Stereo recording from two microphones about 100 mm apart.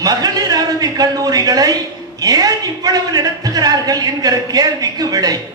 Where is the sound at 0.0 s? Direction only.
40° right (ahead or behind).